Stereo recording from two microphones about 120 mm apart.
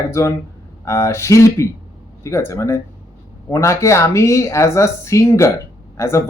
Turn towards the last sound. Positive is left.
turn(degrees=25)  # may be behind; listen again after turning